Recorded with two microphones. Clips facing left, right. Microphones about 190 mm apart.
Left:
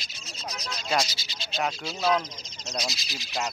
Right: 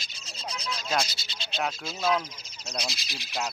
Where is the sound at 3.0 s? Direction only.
55° right (ahead or behind).